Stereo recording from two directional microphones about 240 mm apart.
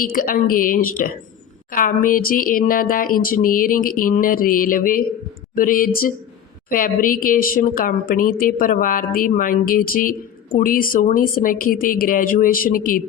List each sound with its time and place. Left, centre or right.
0.0 s speech: left